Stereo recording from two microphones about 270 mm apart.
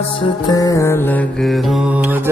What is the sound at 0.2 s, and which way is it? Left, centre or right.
Music, centre.